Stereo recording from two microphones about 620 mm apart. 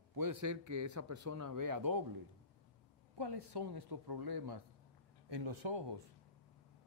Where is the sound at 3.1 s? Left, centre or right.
Right.